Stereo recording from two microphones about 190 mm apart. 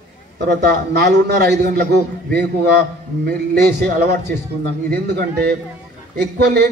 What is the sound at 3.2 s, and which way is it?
A man's voice, 55° right (ahead or behind).